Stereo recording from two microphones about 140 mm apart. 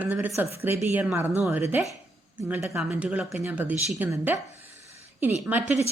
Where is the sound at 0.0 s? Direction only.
10° right (ahead or behind).